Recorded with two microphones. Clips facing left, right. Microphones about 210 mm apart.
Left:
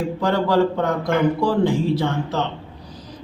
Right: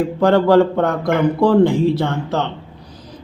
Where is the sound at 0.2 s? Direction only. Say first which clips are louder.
Right 6 dB; 55° right (ahead or behind).